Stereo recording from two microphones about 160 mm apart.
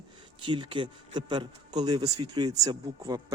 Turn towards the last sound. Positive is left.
turn(degrees=-25)  # may be behind; listen again after turning